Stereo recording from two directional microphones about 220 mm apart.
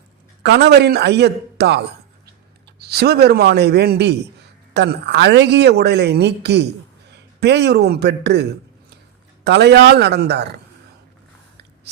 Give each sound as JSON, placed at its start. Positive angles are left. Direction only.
{"t": 0.4, "sound": "speech", "side_deg": -50}
{"t": 2.8, "sound": "speech", "side_deg": -45}